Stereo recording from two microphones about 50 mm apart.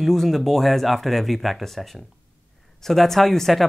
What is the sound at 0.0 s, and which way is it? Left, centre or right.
Speech, centre.